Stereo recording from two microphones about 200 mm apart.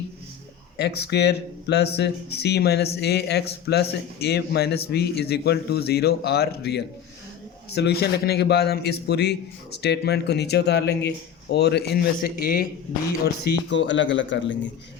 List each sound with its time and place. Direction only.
0.8 s speech: 55° left (ahead or behind)